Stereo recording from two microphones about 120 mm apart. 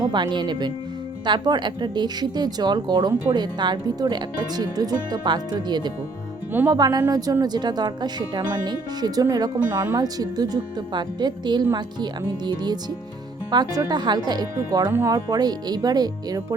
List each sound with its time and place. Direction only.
0.1 s speech: 40° right (ahead or behind)